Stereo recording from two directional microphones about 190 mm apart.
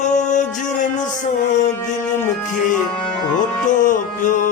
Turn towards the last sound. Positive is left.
turn(degrees=45)  # may be behind; listen again after turning